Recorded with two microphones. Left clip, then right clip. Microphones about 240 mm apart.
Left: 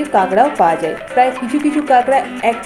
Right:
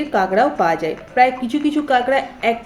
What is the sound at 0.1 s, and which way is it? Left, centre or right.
A woman's voice, centre.